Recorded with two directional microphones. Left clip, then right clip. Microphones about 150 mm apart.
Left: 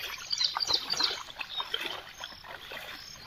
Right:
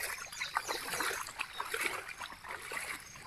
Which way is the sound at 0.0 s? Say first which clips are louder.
Left 8 dB; 45° left (ahead or behind).